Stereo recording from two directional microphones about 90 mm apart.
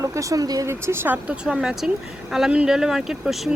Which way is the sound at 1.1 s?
10° right (ahead or behind).